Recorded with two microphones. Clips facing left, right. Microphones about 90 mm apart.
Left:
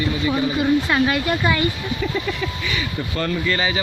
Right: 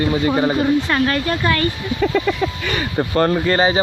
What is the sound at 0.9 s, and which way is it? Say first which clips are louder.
Speech: right 1 dB; 5° left (ahead or behind).